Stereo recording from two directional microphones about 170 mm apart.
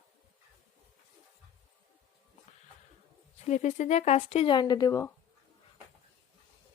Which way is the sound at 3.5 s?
45° left (ahead or behind).